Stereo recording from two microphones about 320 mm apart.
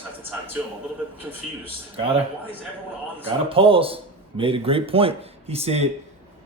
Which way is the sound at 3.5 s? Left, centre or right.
Centre.